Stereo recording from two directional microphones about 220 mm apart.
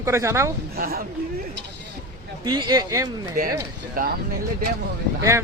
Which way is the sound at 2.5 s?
20° right (ahead or behind).